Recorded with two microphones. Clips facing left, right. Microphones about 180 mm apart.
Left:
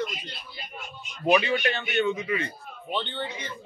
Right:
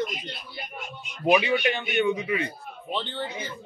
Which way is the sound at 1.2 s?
10° right (ahead or behind).